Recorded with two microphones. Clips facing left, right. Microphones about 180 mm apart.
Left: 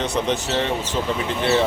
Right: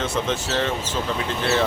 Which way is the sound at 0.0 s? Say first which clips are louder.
Left 2 dB; 15° left (ahead or behind).